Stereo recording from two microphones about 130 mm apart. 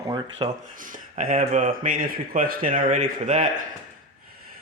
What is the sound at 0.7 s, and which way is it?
Speech, 90° right.